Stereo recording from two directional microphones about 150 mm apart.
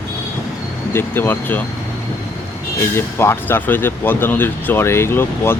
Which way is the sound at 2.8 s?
15° left (ahead or behind).